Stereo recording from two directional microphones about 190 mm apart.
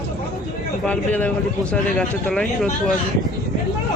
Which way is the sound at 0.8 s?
5° left (ahead or behind).